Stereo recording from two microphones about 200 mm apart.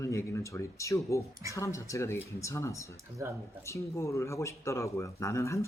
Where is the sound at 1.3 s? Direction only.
15° right (ahead or behind).